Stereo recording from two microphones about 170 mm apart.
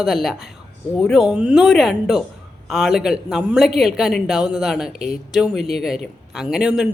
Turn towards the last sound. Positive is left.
turn(degrees=-5)  # may be behind; listen again after turning